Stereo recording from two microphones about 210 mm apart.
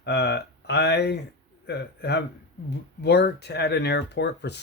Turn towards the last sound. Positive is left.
turn(degrees=55)  # may be behind; listen again after turning